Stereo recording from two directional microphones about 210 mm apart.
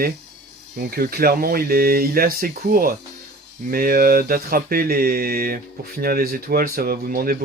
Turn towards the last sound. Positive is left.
turn(degrees=-45)  # may be behind; listen again after turning